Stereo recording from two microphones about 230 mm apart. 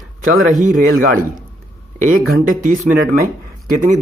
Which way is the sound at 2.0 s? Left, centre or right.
Right.